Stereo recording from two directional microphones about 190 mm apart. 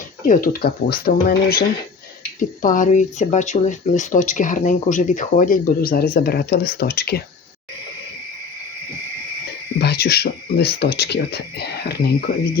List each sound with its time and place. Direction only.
0.3 s speech: 50° left (ahead or behind)
9.8 s speech: 60° left (ahead or behind)